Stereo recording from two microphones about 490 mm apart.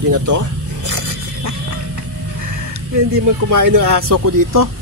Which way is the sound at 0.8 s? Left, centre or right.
Right.